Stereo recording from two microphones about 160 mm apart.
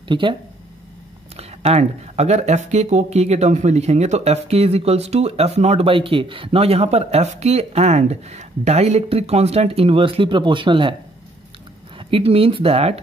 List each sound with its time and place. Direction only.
0.1 s speech: 30° right (ahead or behind)
1.3 s speech: 40° right (ahead or behind)
12.0 s speech: 35° right (ahead or behind)